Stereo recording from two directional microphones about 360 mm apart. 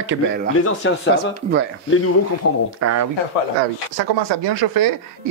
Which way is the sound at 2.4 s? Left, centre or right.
Left.